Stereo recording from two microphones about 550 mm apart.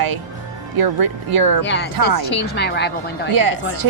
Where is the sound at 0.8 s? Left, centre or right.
Right.